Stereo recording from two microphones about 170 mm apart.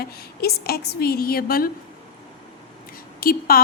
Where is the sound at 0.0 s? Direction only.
65° left (ahead or behind).